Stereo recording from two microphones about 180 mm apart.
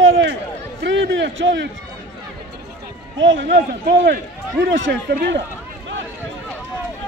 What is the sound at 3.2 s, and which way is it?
Speech, 90° right.